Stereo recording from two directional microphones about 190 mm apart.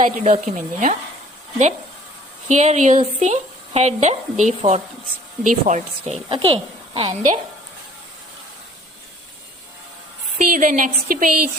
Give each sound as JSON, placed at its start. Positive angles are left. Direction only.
{"t": 0.0, "sound": "speech", "side_deg": -40}
{"t": 2.5, "sound": "speech", "side_deg": -40}
{"t": 6.2, "sound": "a woman's voice", "side_deg": -25}
{"t": 10.3, "sound": "a woman's voice", "side_deg": -45}